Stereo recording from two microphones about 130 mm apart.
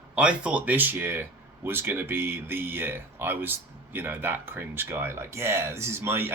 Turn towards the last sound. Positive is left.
turn(degrees=-20)  # may be behind; listen again after turning